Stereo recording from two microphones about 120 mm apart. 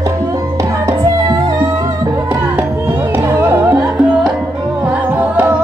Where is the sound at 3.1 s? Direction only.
20° right (ahead or behind).